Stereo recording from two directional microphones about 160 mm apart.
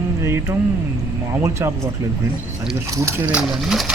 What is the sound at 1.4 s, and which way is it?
Speech, 15° right (ahead or behind).